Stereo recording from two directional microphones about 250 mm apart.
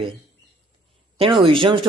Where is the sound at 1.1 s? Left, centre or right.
Right.